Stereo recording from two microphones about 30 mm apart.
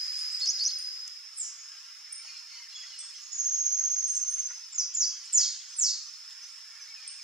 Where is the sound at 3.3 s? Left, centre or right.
Centre.